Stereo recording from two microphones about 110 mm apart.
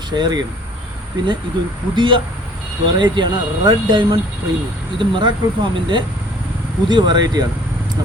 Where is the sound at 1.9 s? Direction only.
45° right (ahead or behind).